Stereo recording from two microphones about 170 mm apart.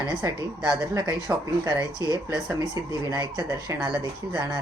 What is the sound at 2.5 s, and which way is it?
A woman's voice, 20° right (ahead or behind).